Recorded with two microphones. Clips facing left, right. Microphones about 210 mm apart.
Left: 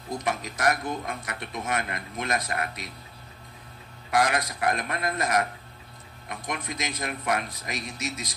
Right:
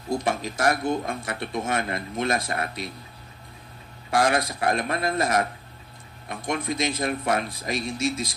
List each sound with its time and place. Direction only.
0.1 s speech: 30° right (ahead or behind)
4.1 s speech: 30° right (ahead or behind)